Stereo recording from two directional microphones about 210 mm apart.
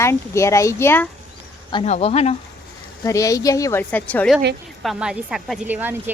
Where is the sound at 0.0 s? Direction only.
15° left (ahead or behind).